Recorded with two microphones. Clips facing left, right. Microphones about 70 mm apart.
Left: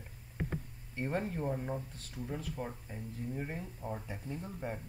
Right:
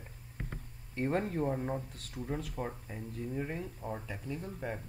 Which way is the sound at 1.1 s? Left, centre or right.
Right.